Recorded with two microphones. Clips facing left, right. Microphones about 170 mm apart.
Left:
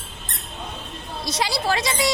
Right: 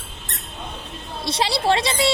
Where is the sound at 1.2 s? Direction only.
30° right (ahead or behind).